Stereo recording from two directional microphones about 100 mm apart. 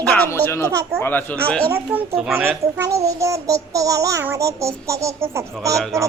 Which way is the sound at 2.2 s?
5° right (ahead or behind).